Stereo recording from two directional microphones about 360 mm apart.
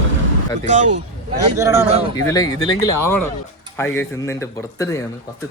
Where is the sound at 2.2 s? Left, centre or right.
Centre.